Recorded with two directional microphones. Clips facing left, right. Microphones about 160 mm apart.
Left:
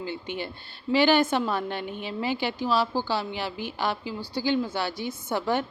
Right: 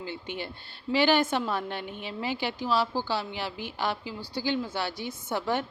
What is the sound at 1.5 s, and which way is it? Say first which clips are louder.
Speech: left 3 dB; 60° left (ahead or behind).